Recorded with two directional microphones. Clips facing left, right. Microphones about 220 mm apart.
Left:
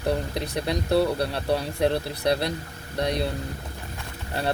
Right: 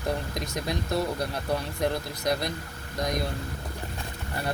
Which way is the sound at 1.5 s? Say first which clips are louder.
Left 5 dB; 30° left (ahead or behind).